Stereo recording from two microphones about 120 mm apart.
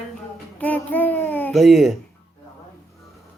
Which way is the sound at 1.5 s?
Centre (ahead or behind).